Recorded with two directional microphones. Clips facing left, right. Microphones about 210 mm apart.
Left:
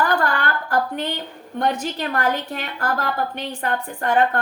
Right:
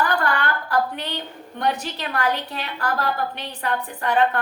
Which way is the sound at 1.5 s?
45° left (ahead or behind).